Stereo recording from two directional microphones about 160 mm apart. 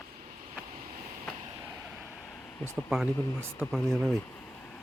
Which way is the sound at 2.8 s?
Centre (ahead or behind).